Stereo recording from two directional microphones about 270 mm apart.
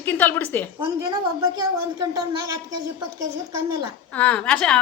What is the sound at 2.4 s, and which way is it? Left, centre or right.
Speech, right.